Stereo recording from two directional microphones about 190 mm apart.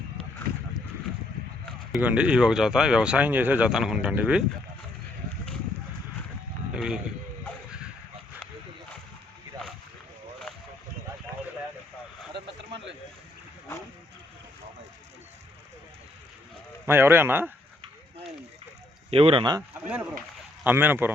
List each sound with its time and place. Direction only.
1.9 s speech: 5° right (ahead or behind)
6.7 s speech: 5° right (ahead or behind)
16.8 s a man's voice: 10° right (ahead or behind)
19.1 s speech: 30° right (ahead or behind)
19.9 s a man's voice: 5° right (ahead or behind)